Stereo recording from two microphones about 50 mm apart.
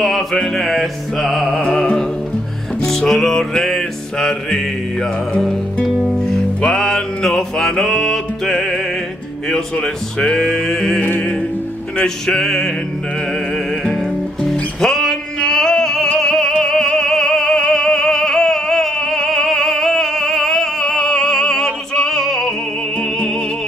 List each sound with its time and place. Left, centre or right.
0.0 s music: centre
1.8 s speech: centre
2.8 s music: centre
5.4 s speech: centre
6.0 s music: centre
9.5 s speech: centre
11.0 s music: left
12.0 s speech: centre
14.4 s music: centre